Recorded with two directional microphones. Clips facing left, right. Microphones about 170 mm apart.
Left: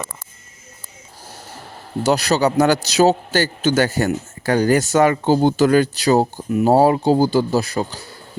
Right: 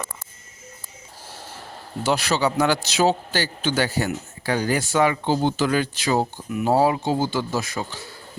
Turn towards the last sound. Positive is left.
turn(degrees=35)  # may be behind; listen again after turning